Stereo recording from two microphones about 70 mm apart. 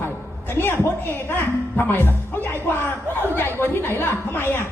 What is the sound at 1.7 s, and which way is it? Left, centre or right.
Speech, left.